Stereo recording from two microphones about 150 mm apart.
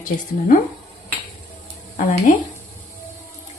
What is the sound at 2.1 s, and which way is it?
Speech, 55° left (ahead or behind).